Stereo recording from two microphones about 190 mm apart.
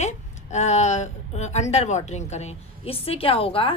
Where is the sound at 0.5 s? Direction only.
35° left (ahead or behind).